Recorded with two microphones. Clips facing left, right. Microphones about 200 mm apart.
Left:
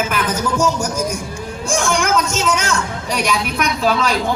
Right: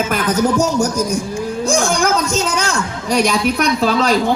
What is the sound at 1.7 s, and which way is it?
A woman's voice, 35° right (ahead or behind).